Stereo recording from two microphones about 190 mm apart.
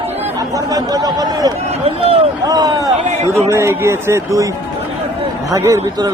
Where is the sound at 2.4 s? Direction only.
20° right (ahead or behind).